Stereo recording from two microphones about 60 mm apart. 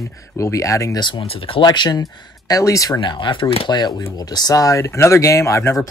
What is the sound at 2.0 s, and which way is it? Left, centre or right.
Speech, left.